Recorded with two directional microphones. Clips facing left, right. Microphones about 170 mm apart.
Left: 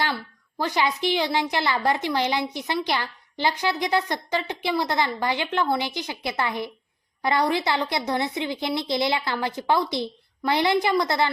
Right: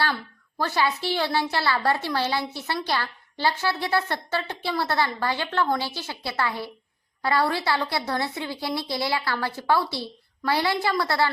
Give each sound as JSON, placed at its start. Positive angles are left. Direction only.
{"t": 0.6, "sound": "a woman's voice", "side_deg": 15}